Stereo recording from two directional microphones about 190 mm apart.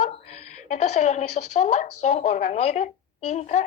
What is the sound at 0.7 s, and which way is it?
Speech, 40° left (ahead or behind).